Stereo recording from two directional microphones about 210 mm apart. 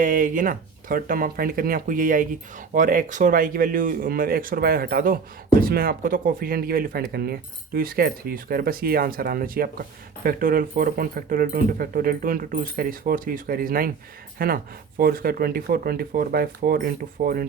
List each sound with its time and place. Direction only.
0.0 s speech: 40° right (ahead or behind)